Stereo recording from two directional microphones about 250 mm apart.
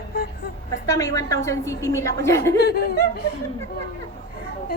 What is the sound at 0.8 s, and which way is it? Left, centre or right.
A woman's voice, centre.